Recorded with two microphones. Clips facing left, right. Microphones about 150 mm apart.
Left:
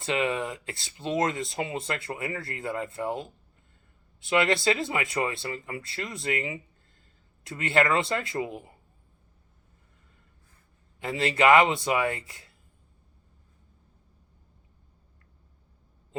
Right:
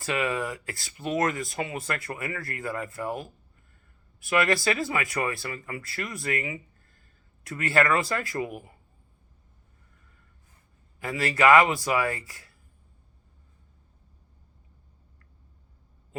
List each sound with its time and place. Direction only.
0.0 s speech: 25° left (ahead or behind)
11.0 s speech: 25° left (ahead or behind)